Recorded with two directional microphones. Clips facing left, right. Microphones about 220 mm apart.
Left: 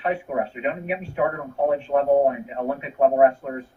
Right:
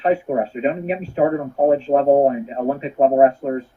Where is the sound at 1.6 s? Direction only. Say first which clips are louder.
Right 5 dB; 35° right (ahead or behind).